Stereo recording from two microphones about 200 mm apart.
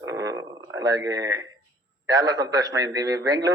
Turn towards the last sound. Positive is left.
turn(degrees=-20)  # may be behind; listen again after turning